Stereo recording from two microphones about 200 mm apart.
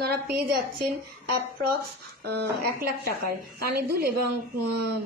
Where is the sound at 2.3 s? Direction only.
55° right (ahead or behind).